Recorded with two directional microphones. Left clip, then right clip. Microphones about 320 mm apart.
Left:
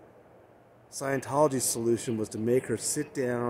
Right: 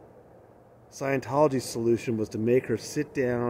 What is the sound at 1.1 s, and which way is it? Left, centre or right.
Speech, centre.